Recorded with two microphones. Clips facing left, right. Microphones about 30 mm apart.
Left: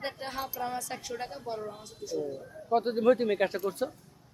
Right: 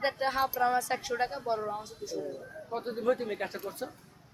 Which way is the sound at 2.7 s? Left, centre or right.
Left.